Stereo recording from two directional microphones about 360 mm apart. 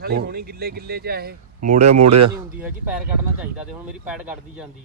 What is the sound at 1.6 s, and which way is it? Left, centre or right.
Speech, right.